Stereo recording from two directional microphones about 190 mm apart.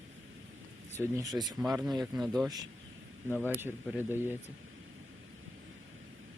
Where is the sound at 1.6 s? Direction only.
5° right (ahead or behind).